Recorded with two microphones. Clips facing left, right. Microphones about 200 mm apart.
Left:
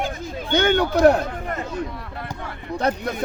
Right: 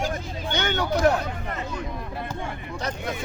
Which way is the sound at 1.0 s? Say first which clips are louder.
Left 7 dB; 45° left (ahead or behind).